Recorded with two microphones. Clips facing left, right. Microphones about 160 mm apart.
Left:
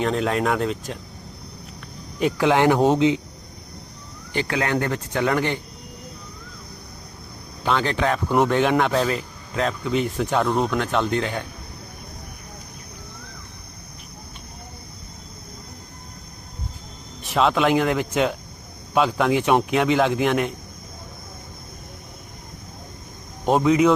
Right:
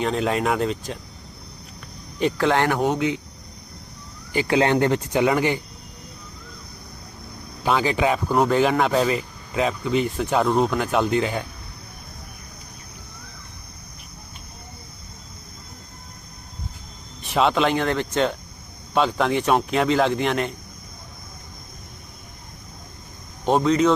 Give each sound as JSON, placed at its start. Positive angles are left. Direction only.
{"t": 0.0, "sound": "speech", "side_deg": 0}
{"t": 2.4, "sound": "speech", "side_deg": 15}
{"t": 4.4, "sound": "speech", "side_deg": -25}
{"t": 7.6, "sound": "speech", "side_deg": -5}
{"t": 17.2, "sound": "speech", "side_deg": 0}
{"t": 23.5, "sound": "speech", "side_deg": 5}